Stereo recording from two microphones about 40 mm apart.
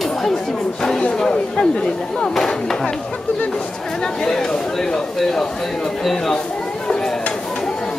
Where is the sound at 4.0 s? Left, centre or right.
Centre.